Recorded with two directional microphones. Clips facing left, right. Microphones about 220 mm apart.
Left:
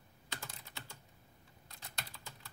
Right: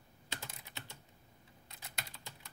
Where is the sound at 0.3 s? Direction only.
25° right (ahead or behind).